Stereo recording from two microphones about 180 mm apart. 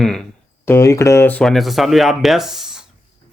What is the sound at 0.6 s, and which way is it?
Speech, 15° left (ahead or behind).